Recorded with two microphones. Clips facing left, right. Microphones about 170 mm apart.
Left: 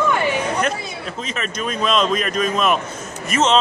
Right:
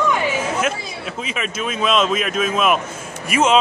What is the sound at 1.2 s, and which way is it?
Speech, 5° right (ahead or behind).